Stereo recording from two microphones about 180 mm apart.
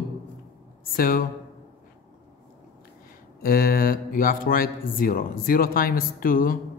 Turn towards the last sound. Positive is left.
turn(degrees=50)  # may be behind; listen again after turning